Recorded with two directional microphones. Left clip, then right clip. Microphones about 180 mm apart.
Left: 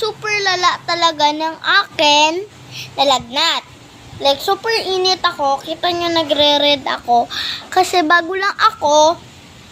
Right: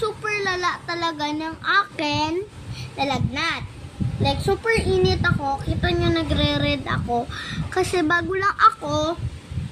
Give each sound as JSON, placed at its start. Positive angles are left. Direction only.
{"t": 0.0, "sound": "a child's voice", "side_deg": -15}